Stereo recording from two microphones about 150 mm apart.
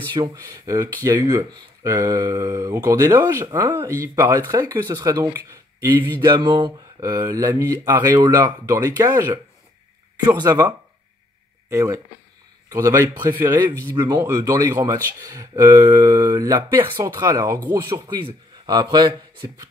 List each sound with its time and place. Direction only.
0.1 s speech: 25° right (ahead or behind)
6.2 s speech: 30° right (ahead or behind)
10.4 s speech: 25° right (ahead or behind)
11.7 s speech: 20° right (ahead or behind)
16.9 s speech: 30° right (ahead or behind)
17.6 s speech: 15° right (ahead or behind)
18.0 s speech: 30° right (ahead or behind)